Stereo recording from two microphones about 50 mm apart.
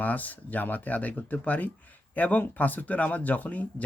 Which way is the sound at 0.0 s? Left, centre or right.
Left.